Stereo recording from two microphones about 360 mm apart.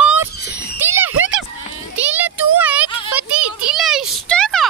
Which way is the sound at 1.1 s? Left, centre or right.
Right.